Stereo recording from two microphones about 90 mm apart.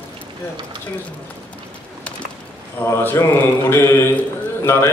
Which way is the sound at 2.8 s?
25° left (ahead or behind).